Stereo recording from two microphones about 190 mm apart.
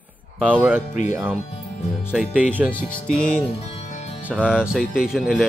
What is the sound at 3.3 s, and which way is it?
Music, 35° left (ahead or behind).